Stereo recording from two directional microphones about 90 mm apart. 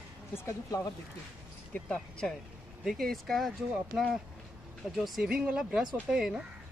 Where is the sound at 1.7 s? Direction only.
10° left (ahead or behind).